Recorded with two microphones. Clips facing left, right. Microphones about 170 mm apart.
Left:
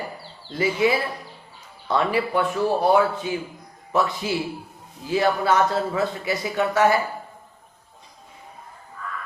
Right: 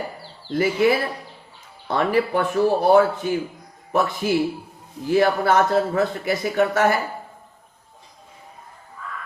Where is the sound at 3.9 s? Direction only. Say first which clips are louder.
Right 3 dB; 55° right (ahead or behind).